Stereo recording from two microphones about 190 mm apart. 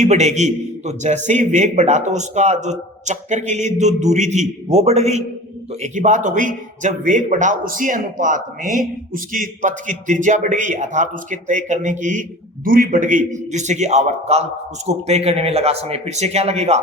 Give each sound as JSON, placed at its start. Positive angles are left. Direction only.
{"t": 0.0, "sound": "a man's voice", "side_deg": -35}